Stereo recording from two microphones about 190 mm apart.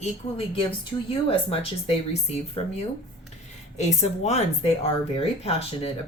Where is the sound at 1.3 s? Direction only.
30° left (ahead or behind).